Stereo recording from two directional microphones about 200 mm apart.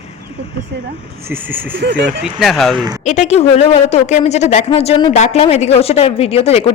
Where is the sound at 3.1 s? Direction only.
35° left (ahead or behind).